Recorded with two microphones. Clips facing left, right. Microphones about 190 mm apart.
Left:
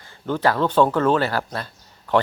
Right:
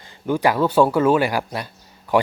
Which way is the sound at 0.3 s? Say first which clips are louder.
Right 2 dB; 10° right (ahead or behind).